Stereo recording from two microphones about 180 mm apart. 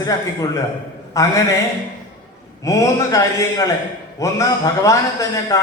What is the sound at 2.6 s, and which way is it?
A man's voice, 15° left (ahead or behind).